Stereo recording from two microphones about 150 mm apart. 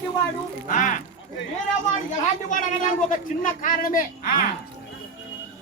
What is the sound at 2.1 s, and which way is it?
Speech, 60° left (ahead or behind).